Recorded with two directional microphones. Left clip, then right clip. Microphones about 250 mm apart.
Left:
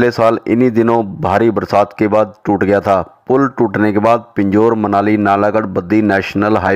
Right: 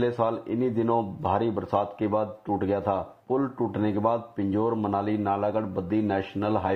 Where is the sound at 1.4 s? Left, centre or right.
Left.